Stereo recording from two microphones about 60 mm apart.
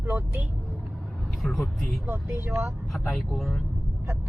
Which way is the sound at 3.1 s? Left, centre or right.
Centre.